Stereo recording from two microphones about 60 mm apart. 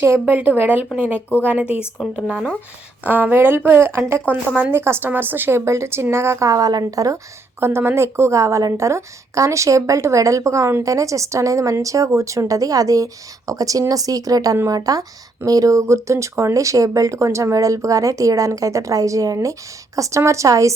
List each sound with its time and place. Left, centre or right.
0.3 s a woman's voice: right
0.9 s a woman's voice: right
2.0 s speech: centre
3.1 s a woman's voice: right
6.5 s speech: right
7.6 s a woman's voice: right
15.4 s a woman's voice: right
16.6 s a woman's voice: right